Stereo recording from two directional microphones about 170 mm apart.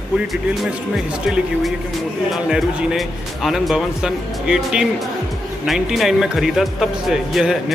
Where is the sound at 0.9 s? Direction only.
5° right (ahead or behind).